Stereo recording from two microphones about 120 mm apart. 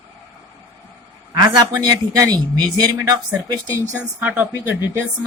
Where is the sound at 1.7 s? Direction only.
30° right (ahead or behind).